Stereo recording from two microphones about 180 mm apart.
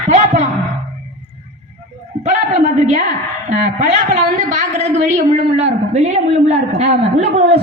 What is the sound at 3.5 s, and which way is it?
A woman's voice, 40° right (ahead or behind).